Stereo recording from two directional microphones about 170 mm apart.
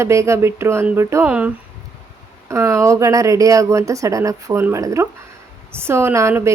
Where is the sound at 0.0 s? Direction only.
15° right (ahead or behind).